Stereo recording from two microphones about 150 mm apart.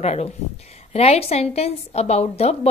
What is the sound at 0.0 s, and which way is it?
A woman's voice, 45° left (ahead or behind).